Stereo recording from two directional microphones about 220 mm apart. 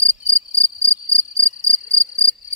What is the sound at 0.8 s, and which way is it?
Cricket, 10° right (ahead or behind).